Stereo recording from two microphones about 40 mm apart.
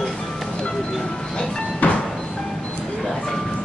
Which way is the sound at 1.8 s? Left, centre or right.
Left.